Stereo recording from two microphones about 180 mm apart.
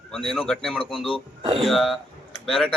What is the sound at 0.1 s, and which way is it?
Speech, 5° left (ahead or behind).